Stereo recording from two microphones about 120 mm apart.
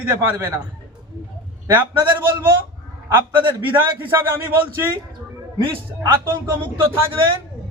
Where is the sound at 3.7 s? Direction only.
20° right (ahead or behind).